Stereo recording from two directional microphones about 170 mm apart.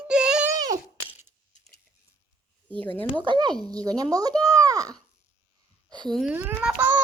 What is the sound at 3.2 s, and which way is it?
Speech, 25° right (ahead or behind).